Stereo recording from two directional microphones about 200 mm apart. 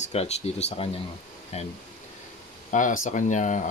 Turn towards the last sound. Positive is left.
turn(degrees=40)  # may be behind; listen again after turning